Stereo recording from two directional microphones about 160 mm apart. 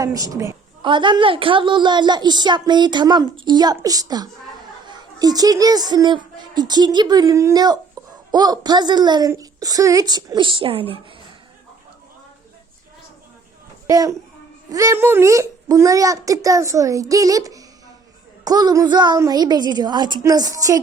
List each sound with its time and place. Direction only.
0.0 s a woman's voice: 20° right (ahead or behind)
8.0 s a sound: 25° right (ahead or behind)
8.3 s a woman's voice: 25° right (ahead or behind)
13.8 s a woman's voice: 20° right (ahead or behind)